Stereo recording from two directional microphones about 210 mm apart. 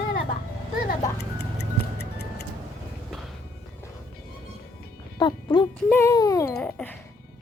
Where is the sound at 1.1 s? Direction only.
50° left (ahead or behind).